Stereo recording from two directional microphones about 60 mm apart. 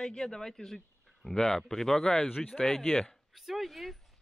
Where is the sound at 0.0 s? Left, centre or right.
Centre.